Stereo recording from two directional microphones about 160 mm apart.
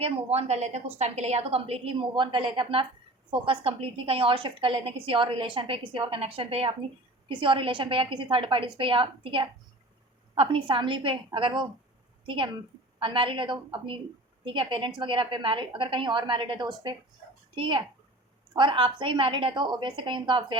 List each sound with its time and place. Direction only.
0.0 s a woman's voice: 40° right (ahead or behind)